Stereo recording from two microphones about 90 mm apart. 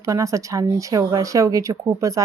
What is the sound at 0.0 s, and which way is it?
Speech, 35° right (ahead or behind).